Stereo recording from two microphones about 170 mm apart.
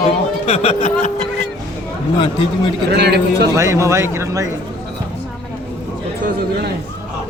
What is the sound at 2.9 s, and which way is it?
Speech, 75° right (ahead or behind).